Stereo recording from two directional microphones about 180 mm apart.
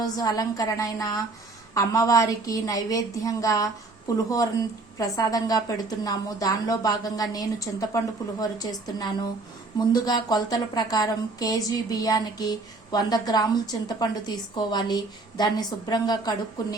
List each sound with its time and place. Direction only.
0.0 s a woman's voice: 20° left (ahead or behind)
4.9 s a woman's voice: 20° left (ahead or behind)